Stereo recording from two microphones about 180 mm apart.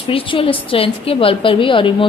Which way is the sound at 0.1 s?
30° left (ahead or behind).